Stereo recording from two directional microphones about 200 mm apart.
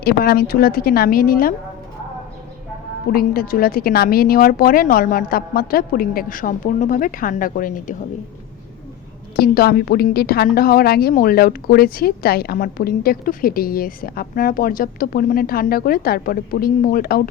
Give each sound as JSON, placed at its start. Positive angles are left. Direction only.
{"t": 0.0, "sound": "a woman's voice", "side_deg": 50}
{"t": 3.1, "sound": "a woman's voice", "side_deg": 45}
{"t": 9.3, "sound": "a woman's voice", "side_deg": 50}